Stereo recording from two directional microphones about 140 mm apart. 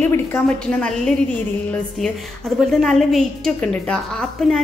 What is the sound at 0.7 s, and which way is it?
A woman's voice, 5° left (ahead or behind).